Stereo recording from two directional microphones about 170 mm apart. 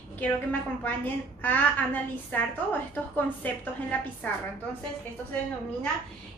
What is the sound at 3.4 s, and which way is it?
Speech, 10° left (ahead or behind).